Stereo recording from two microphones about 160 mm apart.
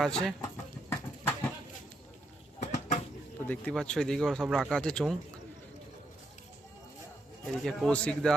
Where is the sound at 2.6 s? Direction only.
45° left (ahead or behind).